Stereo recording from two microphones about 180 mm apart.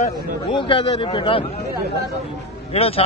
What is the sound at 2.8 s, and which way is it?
Speech, 35° left (ahead or behind).